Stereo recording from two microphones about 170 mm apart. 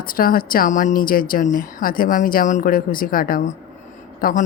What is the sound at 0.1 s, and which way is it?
Speech, 55° left (ahead or behind).